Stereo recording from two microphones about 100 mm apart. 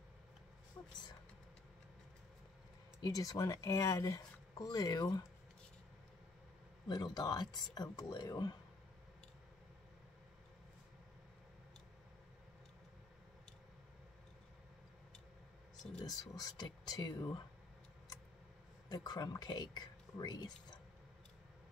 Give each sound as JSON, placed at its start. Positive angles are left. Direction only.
{"t": 0.8, "sound": "speech", "side_deg": 30}
{"t": 3.0, "sound": "speech", "side_deg": 40}
{"t": 6.9, "sound": "speech", "side_deg": 45}
{"t": 16.1, "sound": "speech", "side_deg": 45}
{"t": 18.9, "sound": "speech", "side_deg": 45}